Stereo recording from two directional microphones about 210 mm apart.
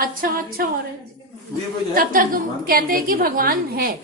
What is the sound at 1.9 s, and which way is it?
A woman's voice, 40° right (ahead or behind).